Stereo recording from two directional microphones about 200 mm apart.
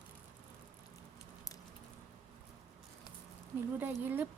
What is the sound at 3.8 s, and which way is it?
Speech, 10° right (ahead or behind).